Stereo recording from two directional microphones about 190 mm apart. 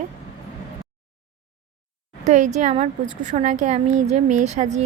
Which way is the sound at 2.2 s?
40° right (ahead or behind).